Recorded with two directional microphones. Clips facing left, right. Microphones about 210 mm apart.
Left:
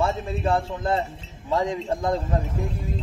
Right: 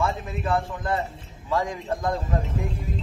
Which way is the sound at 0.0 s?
30° left (ahead or behind).